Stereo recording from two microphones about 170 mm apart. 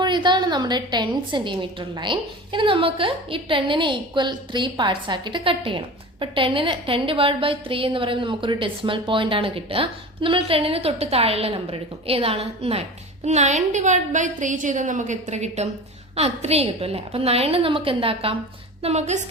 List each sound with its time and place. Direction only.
0.0 s a woman's voice: 25° right (ahead or behind)